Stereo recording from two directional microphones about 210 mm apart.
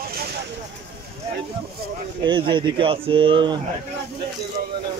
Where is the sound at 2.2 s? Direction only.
20° right (ahead or behind).